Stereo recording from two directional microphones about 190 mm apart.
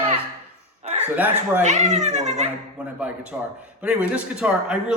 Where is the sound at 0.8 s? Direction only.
35° right (ahead or behind).